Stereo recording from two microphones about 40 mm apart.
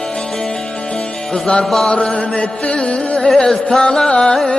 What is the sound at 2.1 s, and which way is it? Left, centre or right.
Music, left.